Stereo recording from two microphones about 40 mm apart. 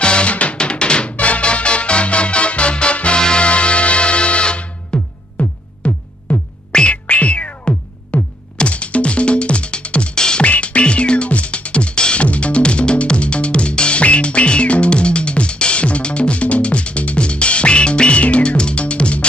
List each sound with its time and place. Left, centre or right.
0.0 s music: left
5.4 s music: left
6.7 s music: left
6.9 s music: left
8.5 s music: left
10.2 s music: centre
10.4 s music: left